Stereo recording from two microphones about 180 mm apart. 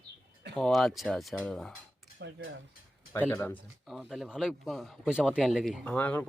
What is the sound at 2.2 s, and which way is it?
Speech, 80° right.